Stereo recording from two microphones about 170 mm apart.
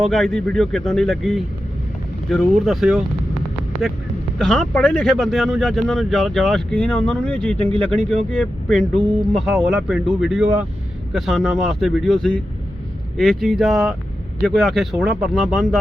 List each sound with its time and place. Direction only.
0.0 s speech: centre (ahead or behind)
4.4 s speech: 5° left (ahead or behind)